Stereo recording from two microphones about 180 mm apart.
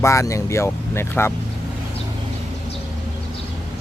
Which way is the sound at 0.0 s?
15° left (ahead or behind).